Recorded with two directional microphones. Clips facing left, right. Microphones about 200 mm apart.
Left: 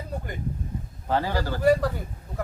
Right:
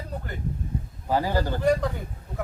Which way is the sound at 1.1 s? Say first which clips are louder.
Right 1 dB; 10° right (ahead or behind).